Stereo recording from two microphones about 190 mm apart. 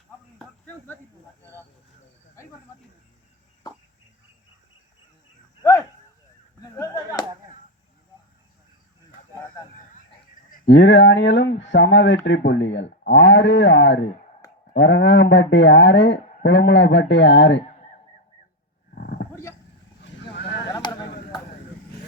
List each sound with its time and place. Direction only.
0.3 s chop: 5° left (ahead or behind)
2.4 s cricket: 15° left (ahead or behind)
6.6 s whip: 15° left (ahead or behind)
10.7 s speech: 70° left (ahead or behind)
18.9 s a sound: 55° left (ahead or behind)
20.0 s vehicle: 65° left (ahead or behind)
20.7 s a sound: 20° left (ahead or behind)